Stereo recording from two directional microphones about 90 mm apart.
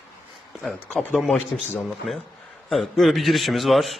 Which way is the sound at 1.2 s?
Centre (ahead or behind).